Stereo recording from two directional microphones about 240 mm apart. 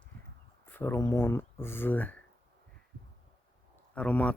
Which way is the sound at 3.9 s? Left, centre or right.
Centre.